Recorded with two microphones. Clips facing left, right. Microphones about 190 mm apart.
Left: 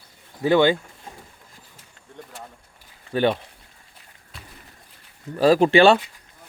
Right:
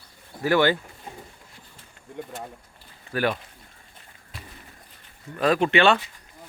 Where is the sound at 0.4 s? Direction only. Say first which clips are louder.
Left 3 dB; 20° left (ahead or behind).